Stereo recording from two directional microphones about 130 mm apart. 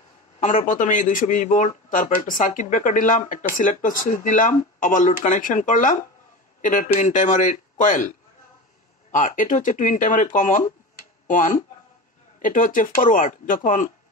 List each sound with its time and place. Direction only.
0.4 s speech: 75° left (ahead or behind)
9.1 s speech: 85° left